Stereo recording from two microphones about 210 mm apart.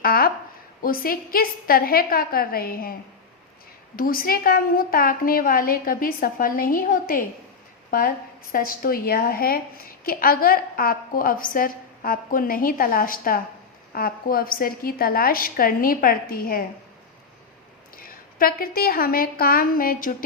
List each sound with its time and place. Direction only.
0.0 s a sound: 45° left (ahead or behind)
0.8 s a woman's voice: 45° left (ahead or behind)
3.9 s a woman's voice: 45° left (ahead or behind)
17.9 s a woman's voice: 45° left (ahead or behind)